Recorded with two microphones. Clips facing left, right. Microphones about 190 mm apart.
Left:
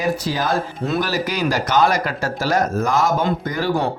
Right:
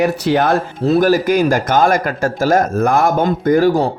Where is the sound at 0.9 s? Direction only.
50° right (ahead or behind).